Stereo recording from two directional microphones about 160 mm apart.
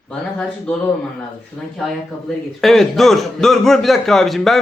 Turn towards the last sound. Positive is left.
turn(degrees=0)  # may be behind; listen again after turning